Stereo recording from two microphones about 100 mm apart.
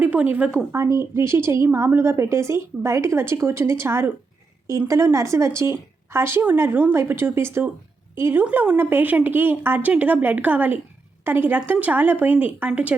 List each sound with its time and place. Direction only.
0.0 s a woman's voice: 15° right (ahead or behind)
0.7 s a woman's voice: 30° right (ahead or behind); by 13.0 s 15° right (ahead or behind)